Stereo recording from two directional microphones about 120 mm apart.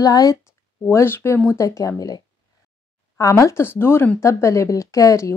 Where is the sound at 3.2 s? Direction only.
25° left (ahead or behind).